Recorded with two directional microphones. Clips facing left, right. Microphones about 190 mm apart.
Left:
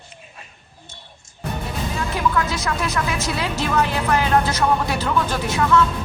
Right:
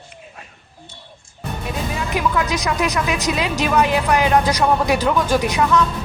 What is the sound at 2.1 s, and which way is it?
Speech, 15° right (ahead or behind).